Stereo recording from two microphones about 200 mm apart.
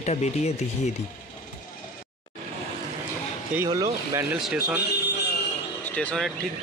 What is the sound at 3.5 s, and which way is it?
Speech, 15° right (ahead or behind).